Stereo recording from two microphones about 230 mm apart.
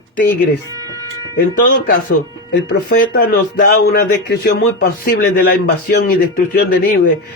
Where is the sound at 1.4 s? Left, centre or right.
Left.